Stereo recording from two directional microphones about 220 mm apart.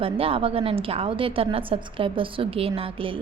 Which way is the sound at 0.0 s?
25° right (ahead or behind).